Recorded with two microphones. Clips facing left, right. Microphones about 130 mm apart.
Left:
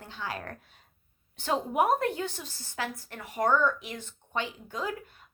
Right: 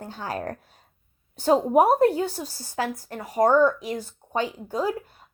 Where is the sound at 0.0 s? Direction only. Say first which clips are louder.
Right 7 dB; 40° right (ahead or behind).